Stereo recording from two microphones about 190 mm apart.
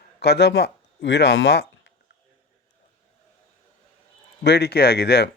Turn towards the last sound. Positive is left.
turn(degrees=55)  # may be behind; listen again after turning